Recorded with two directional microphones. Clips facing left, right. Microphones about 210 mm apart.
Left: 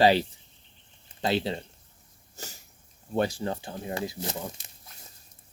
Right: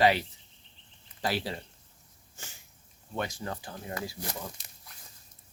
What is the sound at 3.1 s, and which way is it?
Speech, 30° left (ahead or behind).